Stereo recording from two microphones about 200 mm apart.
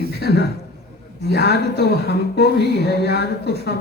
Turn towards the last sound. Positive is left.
turn(degrees=55)  # may be behind; listen again after turning